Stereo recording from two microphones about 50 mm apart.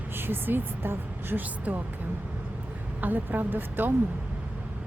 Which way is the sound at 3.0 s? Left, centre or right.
Right.